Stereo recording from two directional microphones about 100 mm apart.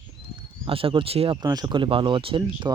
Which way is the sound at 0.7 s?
65° right (ahead or behind).